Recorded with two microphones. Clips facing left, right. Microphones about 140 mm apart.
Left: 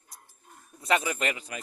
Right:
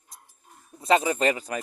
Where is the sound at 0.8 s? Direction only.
30° right (ahead or behind).